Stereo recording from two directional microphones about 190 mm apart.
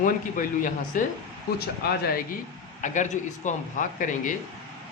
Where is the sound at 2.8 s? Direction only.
40° left (ahead or behind).